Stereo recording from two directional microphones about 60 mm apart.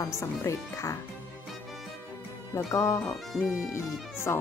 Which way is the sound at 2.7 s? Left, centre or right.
Left.